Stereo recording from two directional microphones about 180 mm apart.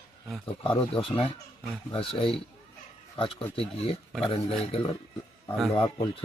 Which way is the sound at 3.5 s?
30° left (ahead or behind).